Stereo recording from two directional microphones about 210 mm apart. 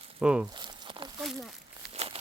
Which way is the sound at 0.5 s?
20° right (ahead or behind).